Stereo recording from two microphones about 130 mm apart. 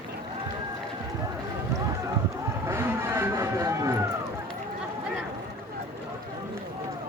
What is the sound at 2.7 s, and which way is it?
Vehicle, 20° right (ahead or behind).